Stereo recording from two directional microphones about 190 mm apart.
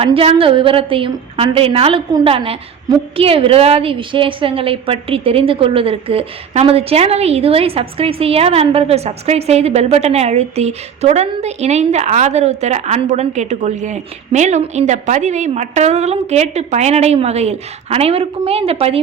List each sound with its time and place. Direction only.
0.0 s a woman's voice: 30° right (ahead or behind)